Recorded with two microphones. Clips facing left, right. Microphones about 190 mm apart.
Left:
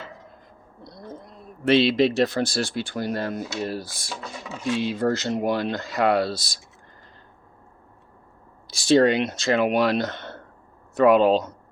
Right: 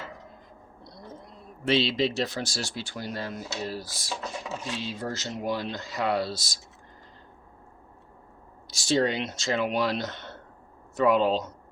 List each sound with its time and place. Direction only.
1.6 s speech: 60° left (ahead or behind)
8.6 s speech: 60° left (ahead or behind)